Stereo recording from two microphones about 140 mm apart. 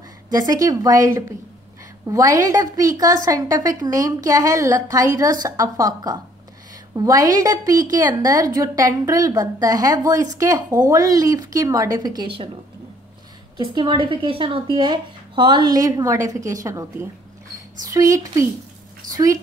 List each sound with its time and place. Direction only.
0.3 s a woman's voice: 25° right (ahead or behind)
13.7 s a woman's voice: 35° right (ahead or behind)